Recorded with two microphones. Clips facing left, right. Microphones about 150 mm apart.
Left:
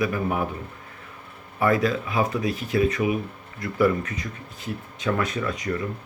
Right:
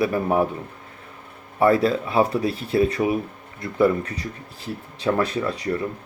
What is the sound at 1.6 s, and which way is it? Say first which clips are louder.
Speech: right 4 dB; 30° right (ahead or behind).